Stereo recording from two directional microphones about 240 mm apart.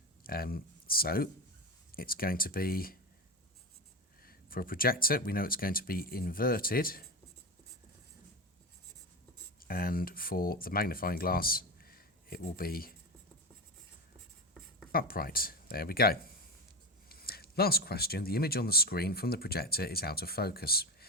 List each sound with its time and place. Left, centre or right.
0.3 s speech: left
4.2 s speech: left
9.6 s speech: left
14.9 s speech: left